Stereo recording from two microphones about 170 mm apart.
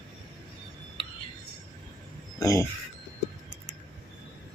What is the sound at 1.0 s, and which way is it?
Whispering, 30° left (ahead or behind).